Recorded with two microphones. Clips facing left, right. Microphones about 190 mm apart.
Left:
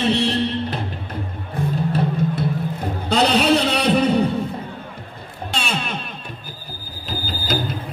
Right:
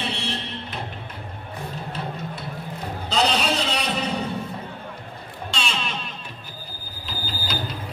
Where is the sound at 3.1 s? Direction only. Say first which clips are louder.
Left 6 dB; 60° left (ahead or behind).